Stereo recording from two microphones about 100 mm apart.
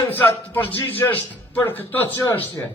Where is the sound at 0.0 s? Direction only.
20° left (ahead or behind).